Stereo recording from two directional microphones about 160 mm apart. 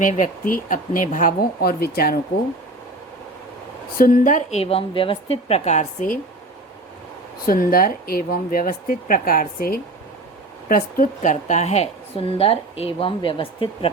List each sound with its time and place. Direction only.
0.0 s speech: 55° left (ahead or behind); by 2.1 s 70° left (ahead or behind)
3.9 s a woman's voice: 60° left (ahead or behind)
7.4 s a woman's voice: 65° left (ahead or behind); by 13.9 s 35° left (ahead or behind)